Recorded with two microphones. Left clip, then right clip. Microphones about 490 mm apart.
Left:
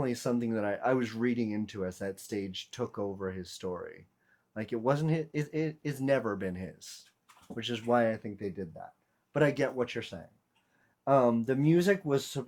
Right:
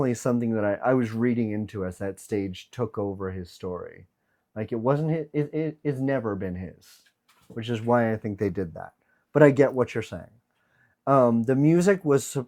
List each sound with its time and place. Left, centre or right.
0.0 s speech: right